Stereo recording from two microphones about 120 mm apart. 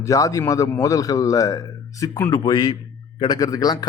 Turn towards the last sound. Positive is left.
turn(degrees=35)  # may be behind; listen again after turning